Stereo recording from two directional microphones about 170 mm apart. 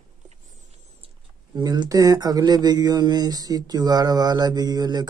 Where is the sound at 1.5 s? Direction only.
25° right (ahead or behind).